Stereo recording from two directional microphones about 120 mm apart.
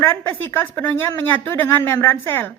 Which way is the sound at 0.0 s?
20° left (ahead or behind).